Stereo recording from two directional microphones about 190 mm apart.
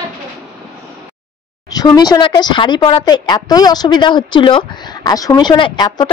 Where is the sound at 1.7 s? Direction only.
20° left (ahead or behind).